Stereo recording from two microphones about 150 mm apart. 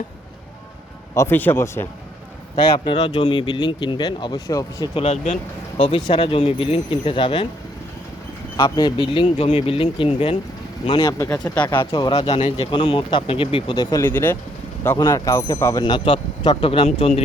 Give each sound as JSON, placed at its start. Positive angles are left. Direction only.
{"t": 1.1, "sound": "speech", "side_deg": 15}
{"t": 3.0, "sound": "speech", "side_deg": 30}
{"t": 4.9, "sound": "speech", "side_deg": 45}
{"t": 5.8, "sound": "speech", "side_deg": 35}
{"t": 8.5, "sound": "speech", "side_deg": 25}
{"t": 10.8, "sound": "speech", "side_deg": 25}
{"t": 11.6, "sound": "speech", "side_deg": 35}
{"t": 13.9, "sound": "speech", "side_deg": 15}
{"t": 15.8, "sound": "speech", "side_deg": 35}